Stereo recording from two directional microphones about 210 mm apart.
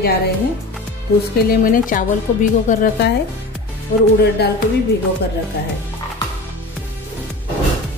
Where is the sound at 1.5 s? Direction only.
40° left (ahead or behind).